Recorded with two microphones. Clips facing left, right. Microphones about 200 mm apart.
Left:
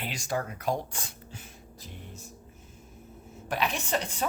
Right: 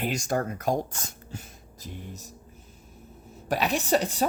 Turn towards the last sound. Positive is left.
turn(degrees=-40)  # may be behind; listen again after turning